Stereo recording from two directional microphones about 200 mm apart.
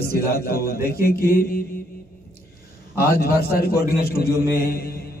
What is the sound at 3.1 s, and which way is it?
A man's voice, 50° left (ahead or behind).